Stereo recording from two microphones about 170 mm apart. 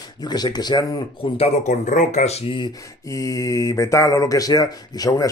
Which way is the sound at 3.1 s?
20° left (ahead or behind).